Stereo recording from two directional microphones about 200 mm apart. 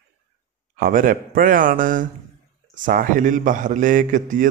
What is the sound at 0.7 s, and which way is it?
A man's voice, 45° right (ahead or behind).